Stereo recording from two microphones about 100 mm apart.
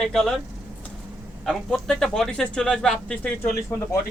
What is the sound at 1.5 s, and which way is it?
Speech, 5° left (ahead or behind).